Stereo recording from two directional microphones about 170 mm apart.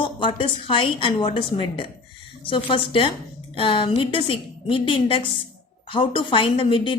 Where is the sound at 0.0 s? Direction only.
30° left (ahead or behind).